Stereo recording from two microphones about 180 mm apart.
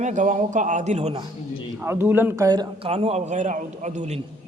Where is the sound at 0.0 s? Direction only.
45° right (ahead or behind).